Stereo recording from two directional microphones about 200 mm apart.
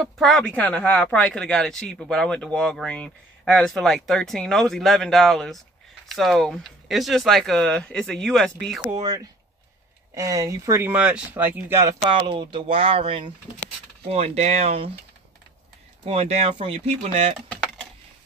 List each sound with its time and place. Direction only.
0.0 s speech: centre (ahead or behind)
8.8 s speech: 20° right (ahead or behind)
12.1 s speech: 25° right (ahead or behind)
16.0 s speech: 30° right (ahead or behind)